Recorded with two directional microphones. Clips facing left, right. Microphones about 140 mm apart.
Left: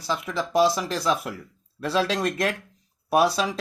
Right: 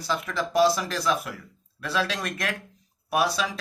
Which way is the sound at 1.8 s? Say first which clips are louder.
Left 4 dB; 30° left (ahead or behind).